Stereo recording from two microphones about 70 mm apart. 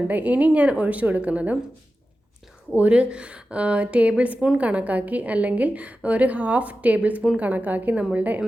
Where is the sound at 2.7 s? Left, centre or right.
Centre.